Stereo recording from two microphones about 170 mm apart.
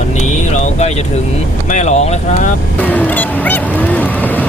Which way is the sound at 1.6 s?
45° left (ahead or behind).